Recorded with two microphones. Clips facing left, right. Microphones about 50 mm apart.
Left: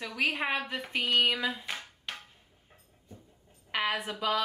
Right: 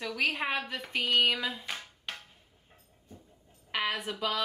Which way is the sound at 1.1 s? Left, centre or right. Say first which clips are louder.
Even; centre.